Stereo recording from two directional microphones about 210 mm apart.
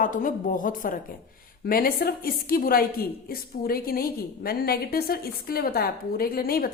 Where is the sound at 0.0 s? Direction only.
40° left (ahead or behind).